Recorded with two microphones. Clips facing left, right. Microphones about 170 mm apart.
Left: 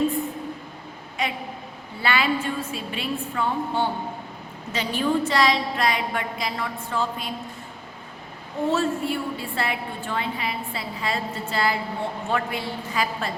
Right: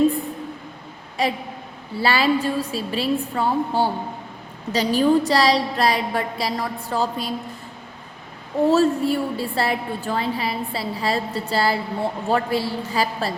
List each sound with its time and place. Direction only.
1.2 s a woman's voice: 35° right (ahead or behind)
8.7 s a woman's voice: 40° right (ahead or behind)